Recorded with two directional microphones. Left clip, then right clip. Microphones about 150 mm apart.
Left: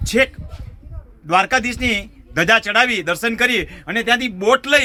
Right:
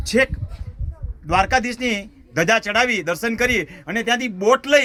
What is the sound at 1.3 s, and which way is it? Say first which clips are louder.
Speech: left 2 dB; 30° right (ahead or behind).